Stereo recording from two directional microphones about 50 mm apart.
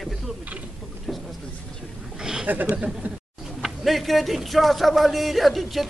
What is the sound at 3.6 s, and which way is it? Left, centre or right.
Speech, centre.